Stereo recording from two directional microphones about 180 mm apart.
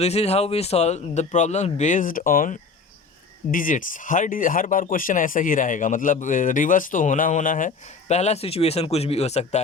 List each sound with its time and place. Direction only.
0.0 s a man's voice: 35° left (ahead or behind)